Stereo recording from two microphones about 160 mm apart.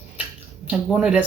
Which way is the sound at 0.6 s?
5° right (ahead or behind).